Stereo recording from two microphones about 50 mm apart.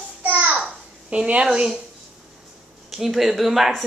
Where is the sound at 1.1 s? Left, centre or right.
Right.